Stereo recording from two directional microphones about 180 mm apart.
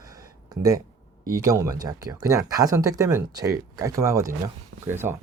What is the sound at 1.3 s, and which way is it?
Speech, 20° right (ahead or behind).